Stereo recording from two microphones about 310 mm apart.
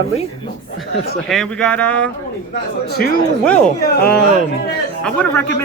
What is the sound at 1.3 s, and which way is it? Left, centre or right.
Speech, centre.